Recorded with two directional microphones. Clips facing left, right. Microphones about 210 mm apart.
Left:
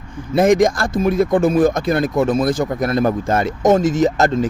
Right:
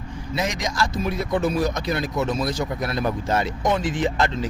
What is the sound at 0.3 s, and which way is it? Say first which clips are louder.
Speech: left 12 dB; 50° left (ahead or behind).